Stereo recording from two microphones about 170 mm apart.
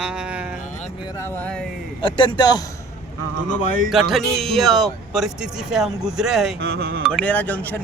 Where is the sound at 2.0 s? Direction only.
30° left (ahead or behind).